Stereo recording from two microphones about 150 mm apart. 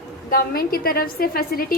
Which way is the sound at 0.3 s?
80° left.